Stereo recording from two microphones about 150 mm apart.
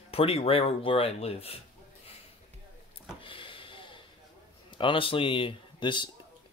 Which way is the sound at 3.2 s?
35° left (ahead or behind).